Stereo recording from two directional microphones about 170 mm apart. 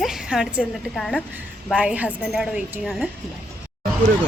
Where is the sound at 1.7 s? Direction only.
5° right (ahead or behind).